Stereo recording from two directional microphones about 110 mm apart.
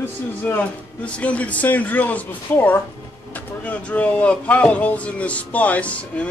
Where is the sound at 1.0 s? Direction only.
10° left (ahead or behind).